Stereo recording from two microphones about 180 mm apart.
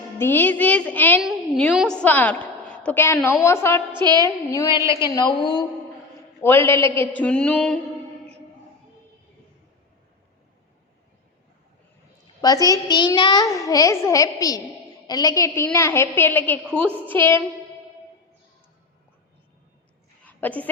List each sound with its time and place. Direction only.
0.2 s a woman's voice: 10° left (ahead or behind)
3.9 s a woman's voice: 25° right (ahead or behind)
4.5 s a child's voice: 20° left (ahead or behind)
4.8 s a woman's voice: 15° right (ahead or behind)
5.0 s a child's voice: 25° left (ahead or behind); by 7.8 s 5° left (ahead or behind)
12.4 s a child's voice: 20° left (ahead or behind)
20.2 s a sound: 10° left (ahead or behind)